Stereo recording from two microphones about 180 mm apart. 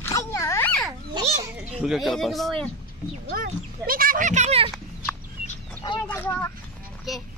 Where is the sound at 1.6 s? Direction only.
Centre (ahead or behind).